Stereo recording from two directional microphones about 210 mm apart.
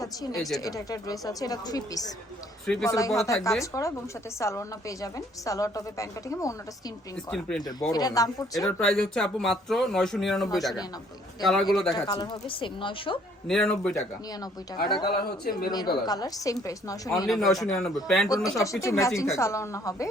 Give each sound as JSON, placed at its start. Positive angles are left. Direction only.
{"t": 0.0, "sound": "speech", "side_deg": 15}
{"t": 0.3, "sound": "speech", "side_deg": 0}
{"t": 0.6, "sound": "a woman's voice", "side_deg": 15}
{"t": 7.3, "sound": "speech", "side_deg": 5}
{"t": 7.6, "sound": "a woman's voice", "side_deg": 20}
{"t": 8.5, "sound": "speech", "side_deg": 0}
{"t": 12.0, "sound": "a woman's voice", "side_deg": 20}
{"t": 13.5, "sound": "speech", "side_deg": 5}
{"t": 15.0, "sound": "speech", "side_deg": 45}
{"t": 15.7, "sound": "a woman's voice", "side_deg": 20}
{"t": 17.2, "sound": "speech", "side_deg": 0}
{"t": 18.3, "sound": "a woman's voice", "side_deg": 15}